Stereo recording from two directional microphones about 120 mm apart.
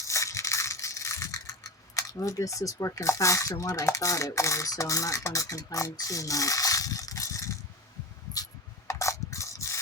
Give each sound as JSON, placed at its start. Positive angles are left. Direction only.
{"t": 0.1, "sound": "crushing", "side_deg": 25}
{"t": 2.0, "sound": "speech", "side_deg": 25}
{"t": 8.9, "sound": "mechanisms", "side_deg": 25}